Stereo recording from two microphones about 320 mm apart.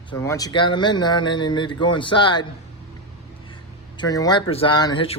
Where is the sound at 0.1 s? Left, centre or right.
Centre.